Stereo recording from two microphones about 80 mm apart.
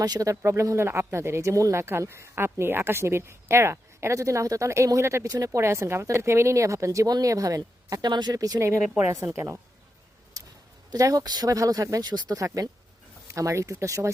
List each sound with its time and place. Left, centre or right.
0.0 s speech: right
9.1 s speech: right
10.9 s speech: right
13.2 s speech: right